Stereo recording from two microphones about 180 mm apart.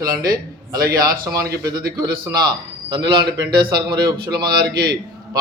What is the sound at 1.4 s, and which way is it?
Speech, 20° right (ahead or behind).